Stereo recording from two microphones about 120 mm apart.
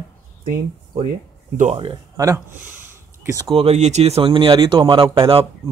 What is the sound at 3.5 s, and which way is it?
Speech, 55° right (ahead or behind).